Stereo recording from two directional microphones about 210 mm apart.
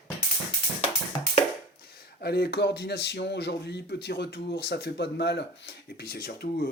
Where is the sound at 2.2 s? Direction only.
50° left (ahead or behind).